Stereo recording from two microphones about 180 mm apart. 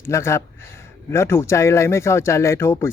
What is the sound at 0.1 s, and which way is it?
Speech, 15° left (ahead or behind).